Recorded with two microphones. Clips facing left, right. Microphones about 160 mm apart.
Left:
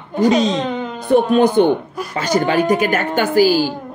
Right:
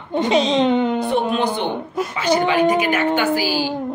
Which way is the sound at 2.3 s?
45° left (ahead or behind).